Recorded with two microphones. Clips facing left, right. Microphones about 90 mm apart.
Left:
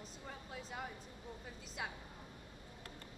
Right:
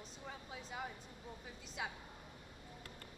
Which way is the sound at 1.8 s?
Centre (ahead or behind).